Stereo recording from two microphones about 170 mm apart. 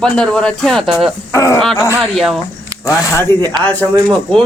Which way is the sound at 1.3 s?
20° left (ahead or behind).